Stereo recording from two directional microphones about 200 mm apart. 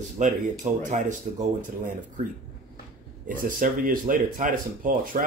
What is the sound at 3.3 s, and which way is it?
Speech, 40° right (ahead or behind).